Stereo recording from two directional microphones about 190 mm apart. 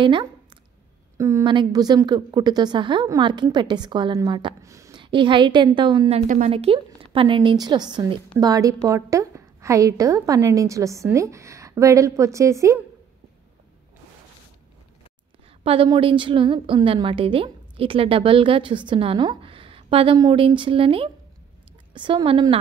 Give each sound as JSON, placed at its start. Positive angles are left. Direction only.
{"t": 0.0, "sound": "a sound", "side_deg": -25}
{"t": 1.1, "sound": "a woman's voice", "side_deg": -15}
{"t": 6.5, "sound": "a woman's voice", "side_deg": -30}
{"t": 15.6, "sound": "a woman's voice", "side_deg": -30}